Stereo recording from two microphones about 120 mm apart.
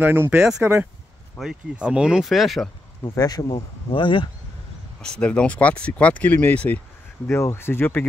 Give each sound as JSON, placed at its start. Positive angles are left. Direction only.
{"t": 0.0, "sound": "speech", "side_deg": -15}
{"t": 1.4, "sound": "speech", "side_deg": -5}
{"t": 3.0, "sound": "speech", "side_deg": 30}
{"t": 3.9, "sound": "speech", "side_deg": 45}
{"t": 5.0, "sound": "speech", "side_deg": 10}